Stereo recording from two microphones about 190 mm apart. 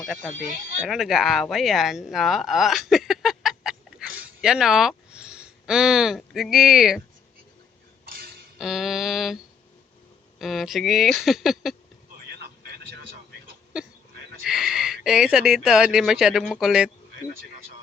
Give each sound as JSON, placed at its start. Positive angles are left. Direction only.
{"t": 0.9, "sound": "speech", "side_deg": 0}
{"t": 8.0, "sound": "cutlery", "side_deg": -50}
{"t": 8.5, "sound": "speech", "side_deg": 0}
{"t": 13.7, "sound": "a sound", "side_deg": -5}
{"t": 14.4, "sound": "speech", "side_deg": 0}